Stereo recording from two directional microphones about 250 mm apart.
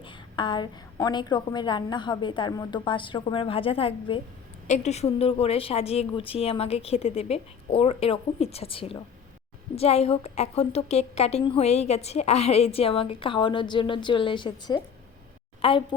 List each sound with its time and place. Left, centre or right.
0.0 s a woman's voice: centre